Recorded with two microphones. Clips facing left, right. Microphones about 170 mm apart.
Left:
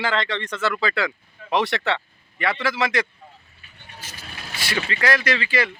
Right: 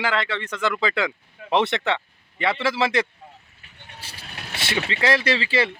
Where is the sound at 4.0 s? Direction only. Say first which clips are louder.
Left 2 dB; 30° right (ahead or behind).